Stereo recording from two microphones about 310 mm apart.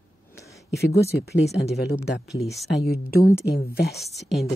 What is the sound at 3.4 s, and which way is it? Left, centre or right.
Speech, left.